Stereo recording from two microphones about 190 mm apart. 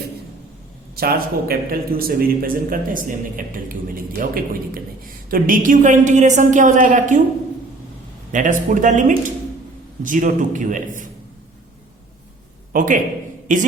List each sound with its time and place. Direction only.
0.9 s a man's voice: 50° right (ahead or behind)
8.3 s a man's voice: 40° right (ahead or behind)
12.7 s a man's voice: 45° right (ahead or behind)